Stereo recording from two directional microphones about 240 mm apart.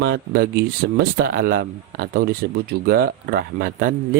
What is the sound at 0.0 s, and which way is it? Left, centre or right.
Speech, right.